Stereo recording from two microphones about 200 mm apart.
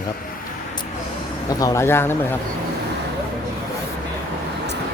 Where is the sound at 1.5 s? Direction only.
15° left (ahead or behind).